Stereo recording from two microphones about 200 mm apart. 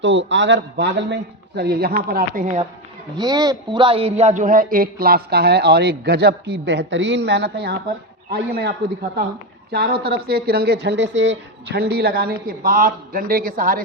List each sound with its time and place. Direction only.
0.0 s a man's voice: 65° right (ahead or behind); by 2.6 s 40° right (ahead or behind)
3.2 s a man's voice: 20° right (ahead or behind); by 13.8 s 45° right (ahead or behind)